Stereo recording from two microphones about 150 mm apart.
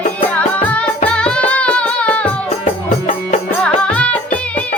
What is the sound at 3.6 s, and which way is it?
Music, 5° left (ahead or behind).